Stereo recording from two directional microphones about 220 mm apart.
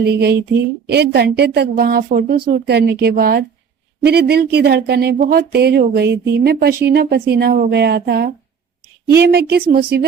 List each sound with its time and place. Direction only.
0.0 s speech: 50° right (ahead or behind)